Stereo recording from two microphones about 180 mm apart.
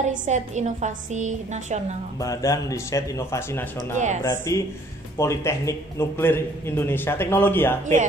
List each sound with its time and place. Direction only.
0.0 s a woman's voice: 40° right (ahead or behind)
2.1 s a man's voice: 20° left (ahead or behind)
3.9 s speech: 45° right (ahead or behind)
4.2 s a man's voice: 15° left (ahead or behind)